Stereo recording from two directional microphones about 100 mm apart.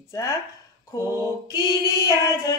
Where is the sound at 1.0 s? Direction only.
30° right (ahead or behind).